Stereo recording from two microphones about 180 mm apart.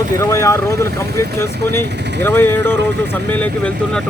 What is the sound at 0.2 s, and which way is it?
Speech, 15° left (ahead or behind).